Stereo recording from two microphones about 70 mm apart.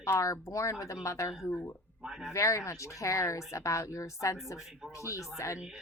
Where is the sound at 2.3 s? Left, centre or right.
Left.